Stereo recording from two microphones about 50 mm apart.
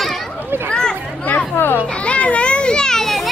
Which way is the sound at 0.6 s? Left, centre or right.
Centre.